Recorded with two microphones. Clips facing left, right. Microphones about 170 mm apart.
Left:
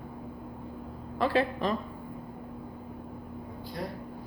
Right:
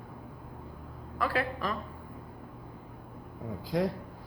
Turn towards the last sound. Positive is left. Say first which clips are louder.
# right 8 dB
turn(degrees=-90)